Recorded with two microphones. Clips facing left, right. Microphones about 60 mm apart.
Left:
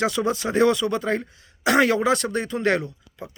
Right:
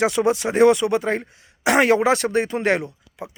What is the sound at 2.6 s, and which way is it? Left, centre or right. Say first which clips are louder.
Speech: right 1 dB; centre.